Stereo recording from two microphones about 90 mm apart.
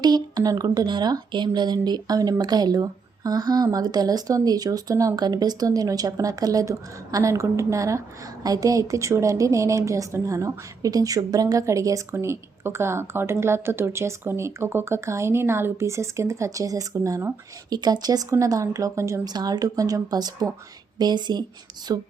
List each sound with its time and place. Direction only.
0.0 s a sound: 45° right (ahead or behind)
0.5 s a woman's voice: 45° right (ahead or behind)
17.7 s a woman's voice: 50° right (ahead or behind); by 19.2 s 35° right (ahead or behind)
19.2 s speech: 50° right (ahead or behind)
21.9 s speech: 45° right (ahead or behind)